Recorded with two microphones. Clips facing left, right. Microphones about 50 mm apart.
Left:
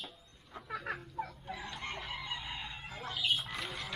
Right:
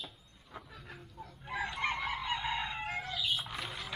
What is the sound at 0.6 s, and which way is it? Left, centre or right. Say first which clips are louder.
Fowl: left 11 dB; left.